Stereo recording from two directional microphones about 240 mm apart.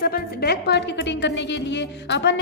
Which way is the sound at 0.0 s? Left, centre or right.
Left.